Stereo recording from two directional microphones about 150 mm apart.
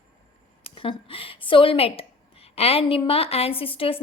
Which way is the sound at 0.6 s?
40° left (ahead or behind).